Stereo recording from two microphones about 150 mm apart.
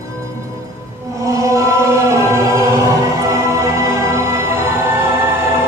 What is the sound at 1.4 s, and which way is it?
Choir, 20° right (ahead or behind).